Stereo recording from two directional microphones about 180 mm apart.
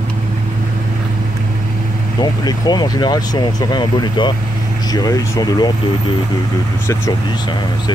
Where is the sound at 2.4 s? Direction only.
20° left (ahead or behind).